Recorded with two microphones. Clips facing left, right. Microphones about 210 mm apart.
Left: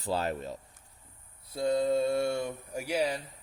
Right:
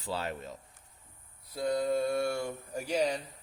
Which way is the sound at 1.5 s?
25° left (ahead or behind).